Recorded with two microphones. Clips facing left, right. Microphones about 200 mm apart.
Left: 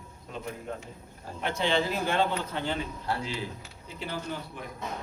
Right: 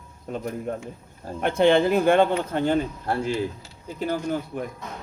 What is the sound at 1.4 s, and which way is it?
Speech, 55° right (ahead or behind).